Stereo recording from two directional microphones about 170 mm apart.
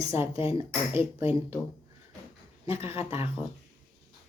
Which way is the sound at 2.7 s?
15° right (ahead or behind).